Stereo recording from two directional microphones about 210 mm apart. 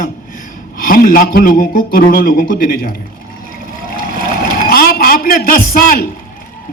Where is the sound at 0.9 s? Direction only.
45° left (ahead or behind).